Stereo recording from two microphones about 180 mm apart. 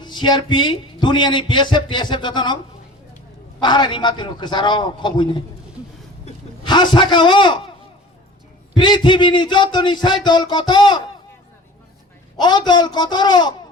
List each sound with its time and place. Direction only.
0.0 s speech: 25° left (ahead or behind)
3.6 s speech: 25° left (ahead or behind)
6.7 s speech: 25° left (ahead or behind)
8.7 s speech: 25° left (ahead or behind)
12.4 s speech: 25° left (ahead or behind)